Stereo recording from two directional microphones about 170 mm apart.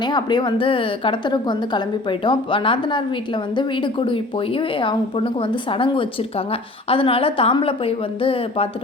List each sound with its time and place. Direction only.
0.0 s a woman's voice: 25° left (ahead or behind)